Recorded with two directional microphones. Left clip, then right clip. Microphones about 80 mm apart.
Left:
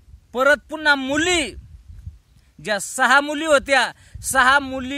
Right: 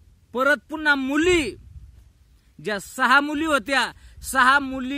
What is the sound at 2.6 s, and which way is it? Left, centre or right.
Speech, left.